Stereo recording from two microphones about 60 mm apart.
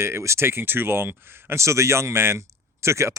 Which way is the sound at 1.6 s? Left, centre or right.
Right.